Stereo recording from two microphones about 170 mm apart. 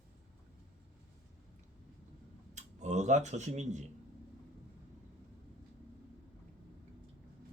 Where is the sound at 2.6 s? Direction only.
45° right (ahead or behind).